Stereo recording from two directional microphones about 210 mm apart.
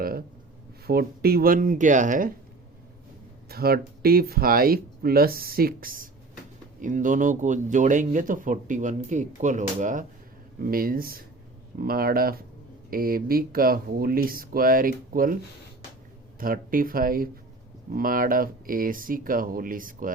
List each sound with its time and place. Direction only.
0.0 s a sound: 45° right (ahead or behind)
0.9 s speech: 45° right (ahead or behind)
3.5 s speech: 45° right (ahead or behind)
16.4 s speech: 40° right (ahead or behind)